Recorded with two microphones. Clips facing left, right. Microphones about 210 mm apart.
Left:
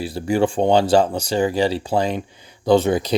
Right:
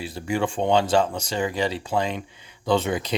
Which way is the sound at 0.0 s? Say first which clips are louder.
Left 6 dB; 35° left (ahead or behind).